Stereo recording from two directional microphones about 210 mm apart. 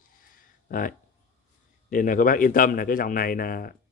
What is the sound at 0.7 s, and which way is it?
Speech, 40° left (ahead or behind).